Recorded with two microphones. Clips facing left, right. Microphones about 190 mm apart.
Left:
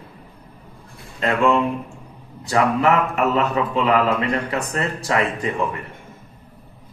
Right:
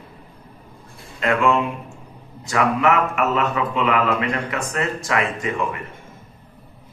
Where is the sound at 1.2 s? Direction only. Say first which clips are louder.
Left 1 dB; 35° left (ahead or behind).